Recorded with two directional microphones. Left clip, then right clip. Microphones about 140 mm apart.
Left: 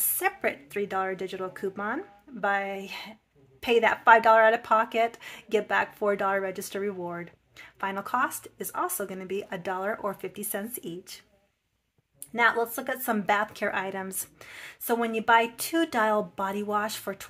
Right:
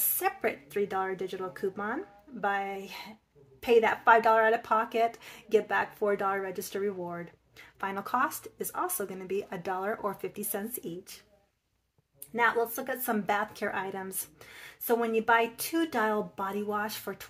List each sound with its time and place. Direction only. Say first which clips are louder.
0.0 s speech: left 2 dB; 15° left (ahead or behind)
12.4 s speech: left 3 dB; 30° left (ahead or behind)